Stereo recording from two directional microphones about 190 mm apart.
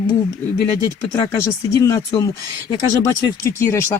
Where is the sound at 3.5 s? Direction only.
10° left (ahead or behind).